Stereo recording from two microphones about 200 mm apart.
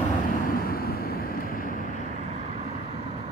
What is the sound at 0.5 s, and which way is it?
Vehicle, 50° left (ahead or behind).